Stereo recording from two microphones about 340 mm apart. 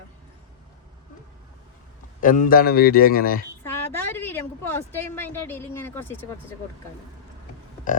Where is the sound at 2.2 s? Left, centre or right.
Left.